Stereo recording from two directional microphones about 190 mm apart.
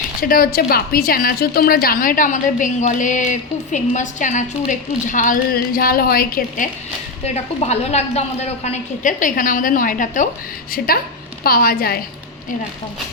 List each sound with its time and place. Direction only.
0.2 s a woman's voice: 50° left (ahead or behind)
7.6 s a woman's voice: 35° left (ahead or behind); by 11.9 s 50° left (ahead or behind)